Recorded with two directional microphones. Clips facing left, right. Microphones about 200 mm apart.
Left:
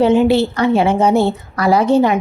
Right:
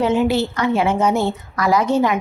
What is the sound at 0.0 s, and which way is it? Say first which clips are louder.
A woman's voice: left 5 dB; 30° left (ahead or behind).